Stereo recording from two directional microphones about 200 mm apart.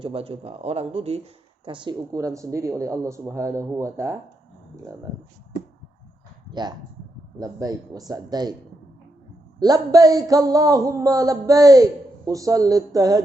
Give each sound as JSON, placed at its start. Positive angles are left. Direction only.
{"t": 0.0, "sound": "speech", "side_deg": -30}
{"t": 6.5, "sound": "speech", "side_deg": -20}
{"t": 9.6, "sound": "speech", "side_deg": -20}